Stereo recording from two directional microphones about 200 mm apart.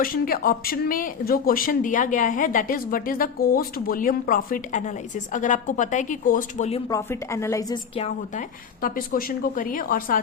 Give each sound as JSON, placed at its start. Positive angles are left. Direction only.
{"t": 0.0, "sound": "speech", "side_deg": 45}
{"t": 6.8, "sound": "a woman's voice", "side_deg": 15}
{"t": 7.9, "sound": "speech", "side_deg": 35}